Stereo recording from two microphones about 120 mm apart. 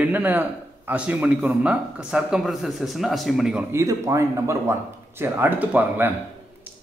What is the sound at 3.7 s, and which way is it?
Speech, 25° right (ahead or behind).